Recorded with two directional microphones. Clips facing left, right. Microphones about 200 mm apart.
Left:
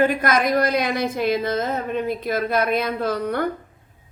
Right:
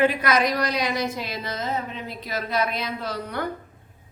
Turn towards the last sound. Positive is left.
turn(degrees=50)  # may be behind; listen again after turning